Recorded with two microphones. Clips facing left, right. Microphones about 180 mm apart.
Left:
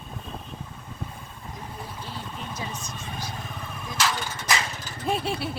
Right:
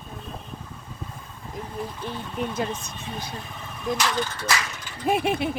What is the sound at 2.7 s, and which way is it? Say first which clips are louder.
Speech: right 3 dB; 60° right (ahead or behind).